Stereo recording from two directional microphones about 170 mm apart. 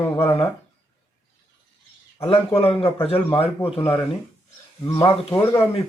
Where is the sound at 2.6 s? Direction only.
35° left (ahead or behind).